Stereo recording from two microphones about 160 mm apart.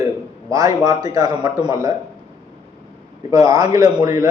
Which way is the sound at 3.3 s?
20° right (ahead or behind).